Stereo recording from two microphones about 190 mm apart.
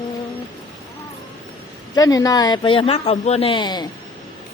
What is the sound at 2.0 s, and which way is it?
A woman's voice, 20° left (ahead or behind).